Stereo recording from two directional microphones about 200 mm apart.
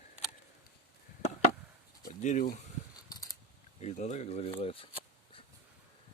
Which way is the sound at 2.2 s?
40° left (ahead or behind).